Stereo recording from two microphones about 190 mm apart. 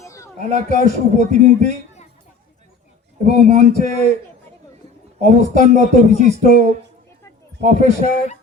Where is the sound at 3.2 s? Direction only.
40° right (ahead or behind).